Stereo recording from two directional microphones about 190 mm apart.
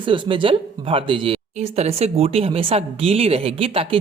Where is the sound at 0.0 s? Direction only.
25° right (ahead or behind).